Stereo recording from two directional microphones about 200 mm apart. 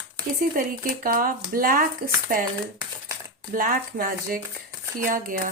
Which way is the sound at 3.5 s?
45° right (ahead or behind).